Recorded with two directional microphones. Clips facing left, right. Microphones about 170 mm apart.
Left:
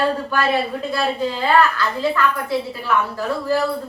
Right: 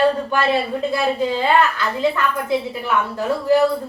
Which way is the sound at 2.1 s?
20° right (ahead or behind).